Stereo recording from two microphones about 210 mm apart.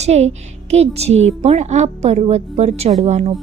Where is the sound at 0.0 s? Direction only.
30° right (ahead or behind).